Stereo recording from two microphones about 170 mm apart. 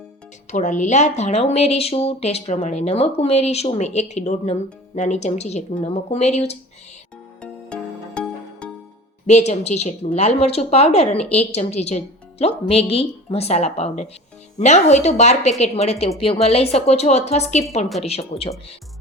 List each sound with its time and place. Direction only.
0.5 s speech: 45° left (ahead or behind)
7.4 s music: 5° left (ahead or behind)
9.2 s speech: 40° left (ahead or behind)